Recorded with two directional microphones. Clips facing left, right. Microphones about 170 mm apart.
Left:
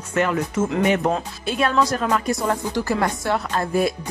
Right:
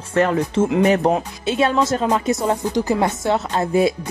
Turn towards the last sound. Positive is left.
turn(degrees=-25)  # may be behind; listen again after turning